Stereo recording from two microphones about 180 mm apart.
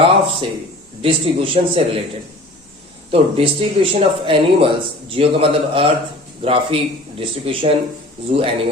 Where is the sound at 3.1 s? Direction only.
35° right (ahead or behind).